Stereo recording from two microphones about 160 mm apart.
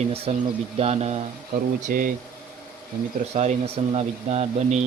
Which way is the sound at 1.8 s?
60° right (ahead or behind).